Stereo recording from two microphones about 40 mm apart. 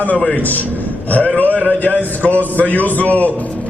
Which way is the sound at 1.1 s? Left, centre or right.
Left.